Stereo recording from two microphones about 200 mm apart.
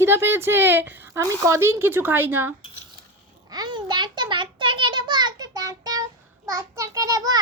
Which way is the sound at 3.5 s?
20° right (ahead or behind).